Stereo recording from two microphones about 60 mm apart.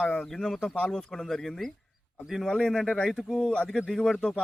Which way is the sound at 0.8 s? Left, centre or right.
Centre.